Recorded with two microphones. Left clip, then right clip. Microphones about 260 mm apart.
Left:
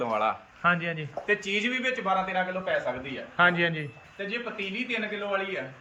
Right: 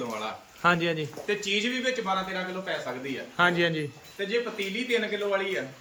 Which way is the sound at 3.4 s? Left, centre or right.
Centre.